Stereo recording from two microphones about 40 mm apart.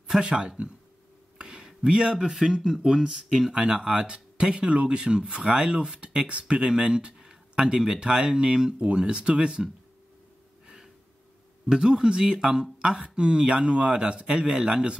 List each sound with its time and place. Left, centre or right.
0.2 s speech: right
1.4 s a sound: centre
1.9 s speech: right
2.1 s speech: centre
11.7 s speech: centre